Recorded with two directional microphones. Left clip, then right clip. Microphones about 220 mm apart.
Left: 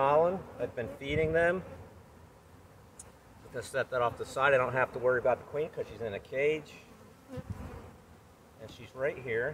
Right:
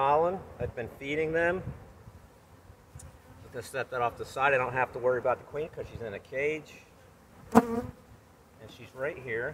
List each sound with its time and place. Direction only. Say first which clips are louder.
0.0 s speech: right 1 dB; 15° right (ahead or behind)
3.5 s speech: left 1 dB; 20° right (ahead or behind)
8.6 s speech: left 1 dB; 15° right (ahead or behind)